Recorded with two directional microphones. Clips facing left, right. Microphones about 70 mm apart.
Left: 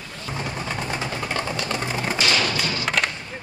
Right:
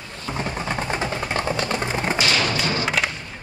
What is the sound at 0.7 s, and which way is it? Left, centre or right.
Music, right.